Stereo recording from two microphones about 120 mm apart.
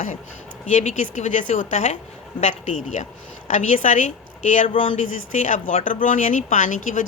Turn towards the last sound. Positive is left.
turn(degrees=90)